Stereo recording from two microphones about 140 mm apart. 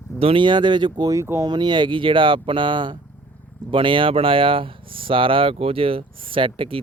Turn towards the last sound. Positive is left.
turn(degrees=-40)  # may be behind; listen again after turning